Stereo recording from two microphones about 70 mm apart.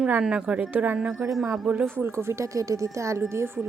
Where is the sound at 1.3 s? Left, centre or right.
Centre.